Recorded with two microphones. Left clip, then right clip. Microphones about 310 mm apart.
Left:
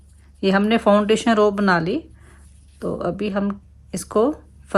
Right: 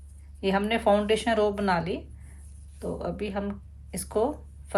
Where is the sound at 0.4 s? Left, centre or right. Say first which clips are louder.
Left 7 dB; centre.